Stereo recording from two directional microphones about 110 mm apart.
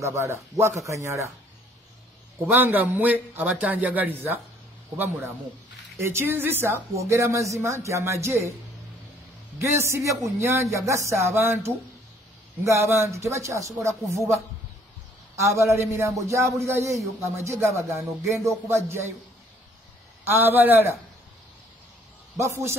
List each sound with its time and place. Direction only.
0.0 s a man's voice: 25° right (ahead or behind)
2.4 s a man's voice: 15° right (ahead or behind)
9.6 s a man's voice: 25° right (ahead or behind)
15.5 s a man's voice: 25° right (ahead or behind)
20.2 s a man's voice: 20° right (ahead or behind)
22.4 s a man's voice: 25° right (ahead or behind)